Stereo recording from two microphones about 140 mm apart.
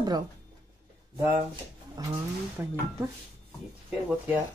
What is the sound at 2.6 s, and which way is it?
Speech, 15° right (ahead or behind).